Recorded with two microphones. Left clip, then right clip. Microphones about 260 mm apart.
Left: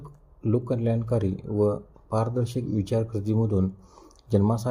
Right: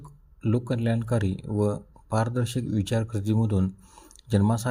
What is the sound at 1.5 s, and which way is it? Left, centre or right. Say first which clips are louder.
Speech: left 4 dB; right.